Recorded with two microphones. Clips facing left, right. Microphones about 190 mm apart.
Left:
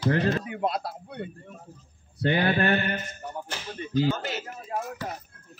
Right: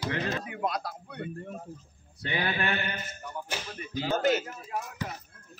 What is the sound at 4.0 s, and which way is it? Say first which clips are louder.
Speech: even; 50° right (ahead or behind).